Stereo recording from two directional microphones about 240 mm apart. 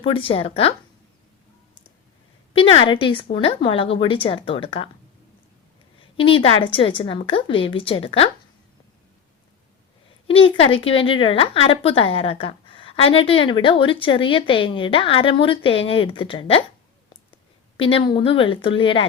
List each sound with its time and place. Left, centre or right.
0.0 s a woman's voice: left
2.5 s a woman's voice: left
6.1 s a woman's voice: left
10.2 s a woman's voice: left